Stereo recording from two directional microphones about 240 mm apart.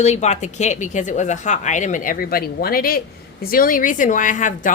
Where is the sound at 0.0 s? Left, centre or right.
Left.